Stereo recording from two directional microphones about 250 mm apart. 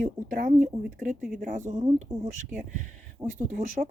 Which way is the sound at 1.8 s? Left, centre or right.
Centre.